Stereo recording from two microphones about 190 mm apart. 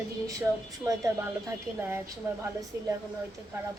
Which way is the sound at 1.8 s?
15° right (ahead or behind).